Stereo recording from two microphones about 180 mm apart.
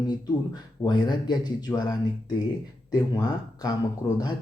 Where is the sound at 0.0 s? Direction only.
20° left (ahead or behind).